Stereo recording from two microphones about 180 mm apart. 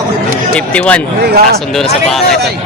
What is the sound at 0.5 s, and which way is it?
Speech, 5° left (ahead or behind).